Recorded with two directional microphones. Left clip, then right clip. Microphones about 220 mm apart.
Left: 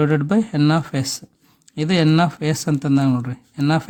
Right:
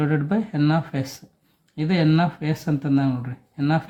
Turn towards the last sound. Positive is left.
turn(degrees=50)  # may be behind; listen again after turning